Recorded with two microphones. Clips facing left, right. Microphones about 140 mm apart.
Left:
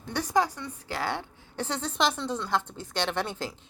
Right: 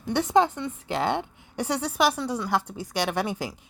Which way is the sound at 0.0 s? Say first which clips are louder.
Right 5 dB; 20° right (ahead or behind).